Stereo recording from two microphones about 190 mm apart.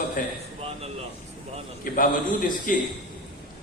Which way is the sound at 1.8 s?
45° left (ahead or behind).